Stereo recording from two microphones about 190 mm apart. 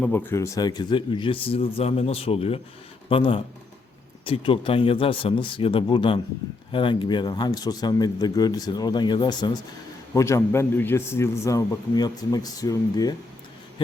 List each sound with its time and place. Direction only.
0.0 s a man's voice: 10° left (ahead or behind)